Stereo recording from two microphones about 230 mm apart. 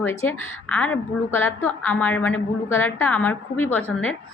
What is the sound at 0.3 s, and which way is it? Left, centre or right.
A woman's voice, centre.